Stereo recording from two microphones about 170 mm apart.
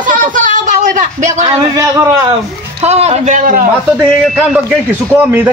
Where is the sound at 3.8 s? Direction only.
Centre (ahead or behind).